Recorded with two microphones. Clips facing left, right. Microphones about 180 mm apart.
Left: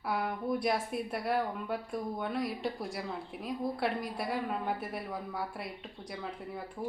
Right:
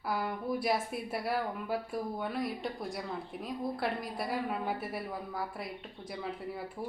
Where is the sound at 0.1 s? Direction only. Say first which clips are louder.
Left 1 dB; centre (ahead or behind).